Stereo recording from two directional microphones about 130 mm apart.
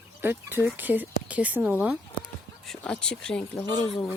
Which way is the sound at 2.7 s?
5° left (ahead or behind).